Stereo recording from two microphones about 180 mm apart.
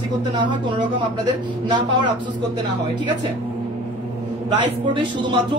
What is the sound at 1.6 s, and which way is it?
Speech, 25° right (ahead or behind).